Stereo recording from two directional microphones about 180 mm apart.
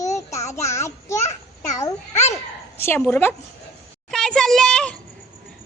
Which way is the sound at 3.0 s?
10° left (ahead or behind).